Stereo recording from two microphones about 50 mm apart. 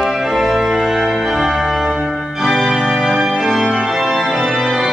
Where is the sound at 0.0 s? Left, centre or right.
Centre.